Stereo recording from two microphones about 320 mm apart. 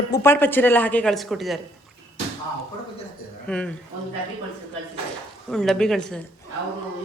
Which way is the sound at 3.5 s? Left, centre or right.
Centre.